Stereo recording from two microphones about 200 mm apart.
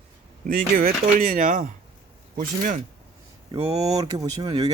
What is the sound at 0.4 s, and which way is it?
Speech, 45° right (ahead or behind).